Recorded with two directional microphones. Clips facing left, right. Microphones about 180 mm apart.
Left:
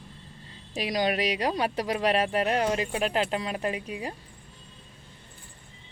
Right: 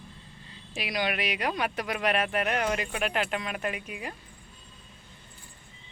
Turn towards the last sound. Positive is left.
turn(degrees=35)  # may be behind; listen again after turning